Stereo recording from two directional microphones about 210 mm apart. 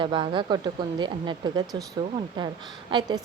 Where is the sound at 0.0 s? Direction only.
25° right (ahead or behind).